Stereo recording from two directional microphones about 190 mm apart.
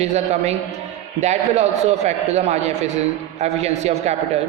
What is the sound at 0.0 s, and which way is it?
A man's voice, 35° right (ahead or behind).